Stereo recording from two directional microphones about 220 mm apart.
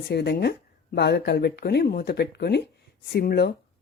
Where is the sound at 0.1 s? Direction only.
45° left (ahead or behind).